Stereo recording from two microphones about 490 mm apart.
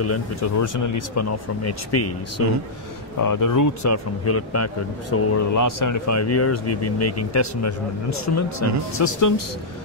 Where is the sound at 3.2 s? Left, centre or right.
Left.